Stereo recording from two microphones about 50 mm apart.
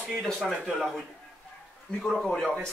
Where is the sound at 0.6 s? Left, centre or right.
Centre.